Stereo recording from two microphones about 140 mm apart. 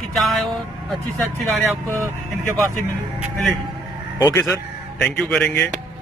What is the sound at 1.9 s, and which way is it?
Speech, 20° right (ahead or behind).